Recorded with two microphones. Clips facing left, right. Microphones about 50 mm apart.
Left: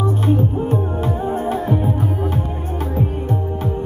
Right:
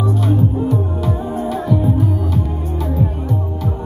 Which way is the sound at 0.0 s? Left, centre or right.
Left.